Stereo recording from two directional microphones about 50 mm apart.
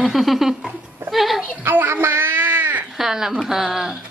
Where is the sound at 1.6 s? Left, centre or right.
Right.